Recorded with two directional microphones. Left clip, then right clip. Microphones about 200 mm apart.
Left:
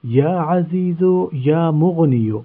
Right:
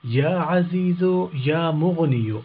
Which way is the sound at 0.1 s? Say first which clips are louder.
Left 4 dB; 45° left (ahead or behind).